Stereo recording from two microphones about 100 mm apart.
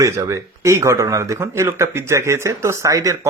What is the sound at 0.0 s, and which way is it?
Speech, 30° right (ahead or behind).